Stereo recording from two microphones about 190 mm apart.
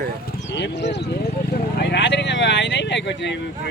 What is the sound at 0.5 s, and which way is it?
Speech, 65° left (ahead or behind).